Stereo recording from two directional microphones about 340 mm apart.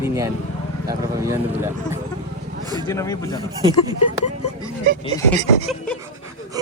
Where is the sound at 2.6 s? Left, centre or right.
Centre.